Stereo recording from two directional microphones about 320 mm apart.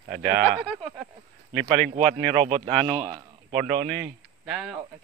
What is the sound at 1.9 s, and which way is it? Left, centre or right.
Speech, centre.